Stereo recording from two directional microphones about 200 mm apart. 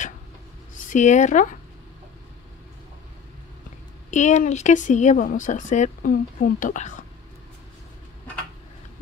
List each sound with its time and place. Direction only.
0.8 s speech: 40° left (ahead or behind)
4.1 s speech: 35° left (ahead or behind)